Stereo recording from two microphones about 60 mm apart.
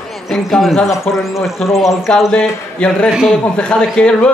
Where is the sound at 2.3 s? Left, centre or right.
Centre.